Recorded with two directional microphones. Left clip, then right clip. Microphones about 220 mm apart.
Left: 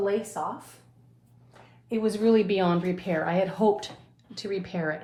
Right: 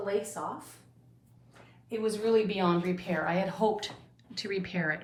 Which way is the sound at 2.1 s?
40° left (ahead or behind).